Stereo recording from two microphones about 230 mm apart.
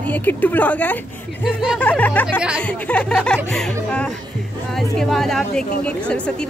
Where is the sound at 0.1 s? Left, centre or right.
Centre.